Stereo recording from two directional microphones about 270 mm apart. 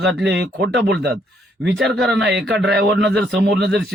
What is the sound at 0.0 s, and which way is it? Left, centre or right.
Speech, right.